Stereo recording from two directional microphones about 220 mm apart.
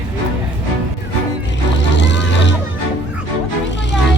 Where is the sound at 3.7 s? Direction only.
55° left (ahead or behind).